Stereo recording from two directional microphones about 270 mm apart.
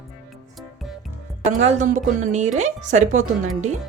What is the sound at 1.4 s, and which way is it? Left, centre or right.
A woman's voice, right.